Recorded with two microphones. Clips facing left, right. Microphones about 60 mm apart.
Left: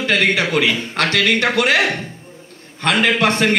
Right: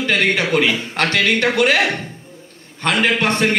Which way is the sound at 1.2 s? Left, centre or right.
Left.